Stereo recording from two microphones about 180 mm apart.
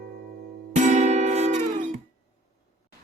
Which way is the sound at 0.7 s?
40° right (ahead or behind).